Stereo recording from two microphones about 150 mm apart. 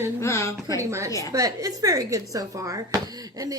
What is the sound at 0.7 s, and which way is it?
Speech, 20° right (ahead or behind).